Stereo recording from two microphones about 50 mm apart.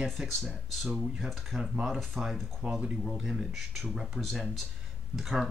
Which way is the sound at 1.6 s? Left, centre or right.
Centre.